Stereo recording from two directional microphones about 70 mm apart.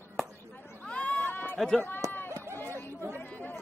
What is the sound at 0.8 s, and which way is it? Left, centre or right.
Run, centre.